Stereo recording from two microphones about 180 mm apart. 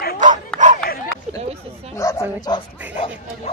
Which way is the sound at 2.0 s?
20° left (ahead or behind).